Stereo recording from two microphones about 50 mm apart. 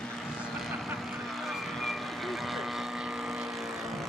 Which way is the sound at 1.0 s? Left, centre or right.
Centre.